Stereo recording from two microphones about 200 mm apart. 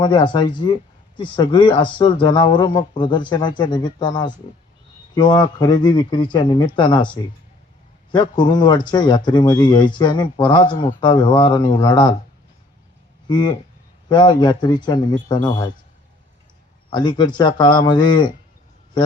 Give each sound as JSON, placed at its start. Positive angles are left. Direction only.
{"t": 0.0, "sound": "speech", "side_deg": 25}
{"t": 13.2, "sound": "speech", "side_deg": 20}
{"t": 16.9, "sound": "speech", "side_deg": 20}